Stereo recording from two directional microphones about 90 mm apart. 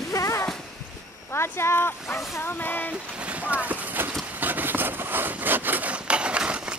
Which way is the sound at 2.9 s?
10° right (ahead or behind).